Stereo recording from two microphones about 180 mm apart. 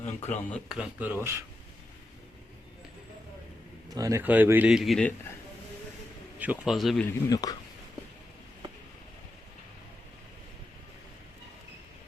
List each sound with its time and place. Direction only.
0.0 s speech: 40° left (ahead or behind)
0.5 s a man's voice: centre (ahead or behind)
3.8 s a man's voice: 20° right (ahead or behind); by 5.1 s centre (ahead or behind)
6.4 s speech: 5° right (ahead or behind)
7.3 s speech: 20° left (ahead or behind)